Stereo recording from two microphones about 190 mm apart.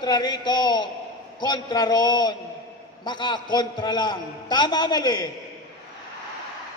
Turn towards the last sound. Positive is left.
turn(degrees=20)  # may be behind; listen again after turning